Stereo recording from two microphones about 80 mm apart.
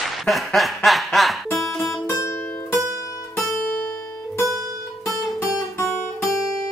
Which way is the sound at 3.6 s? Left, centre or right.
Left.